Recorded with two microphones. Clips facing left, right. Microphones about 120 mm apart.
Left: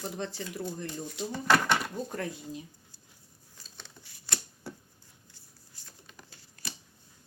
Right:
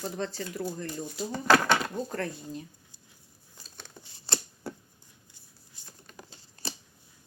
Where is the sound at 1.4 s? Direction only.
90° right.